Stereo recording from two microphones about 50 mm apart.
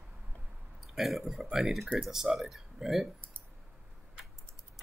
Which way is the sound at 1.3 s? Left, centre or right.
Centre.